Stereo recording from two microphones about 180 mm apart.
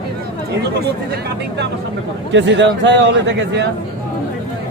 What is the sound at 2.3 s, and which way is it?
A man's voice, 85° right.